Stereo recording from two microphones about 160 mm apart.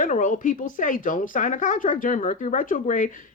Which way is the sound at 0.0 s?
55° left (ahead or behind).